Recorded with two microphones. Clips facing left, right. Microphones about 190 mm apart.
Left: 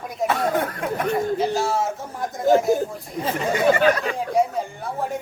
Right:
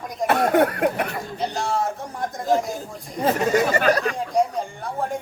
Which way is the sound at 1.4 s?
5° left (ahead or behind).